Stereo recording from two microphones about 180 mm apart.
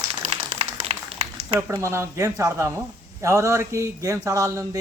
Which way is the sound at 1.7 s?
15° right (ahead or behind).